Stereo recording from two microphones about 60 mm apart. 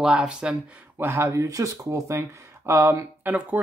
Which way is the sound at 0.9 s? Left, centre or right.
Right.